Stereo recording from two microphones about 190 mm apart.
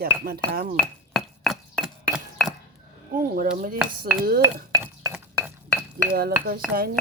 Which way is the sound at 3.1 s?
45° right (ahead or behind).